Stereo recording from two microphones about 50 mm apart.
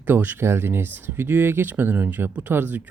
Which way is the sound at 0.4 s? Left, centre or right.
Right.